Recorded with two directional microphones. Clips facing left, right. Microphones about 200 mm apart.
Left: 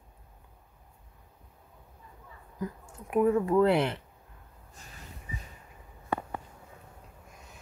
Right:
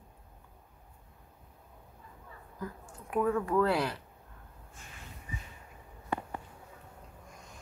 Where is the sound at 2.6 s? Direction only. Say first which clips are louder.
Left 4 dB; 20° left (ahead or behind).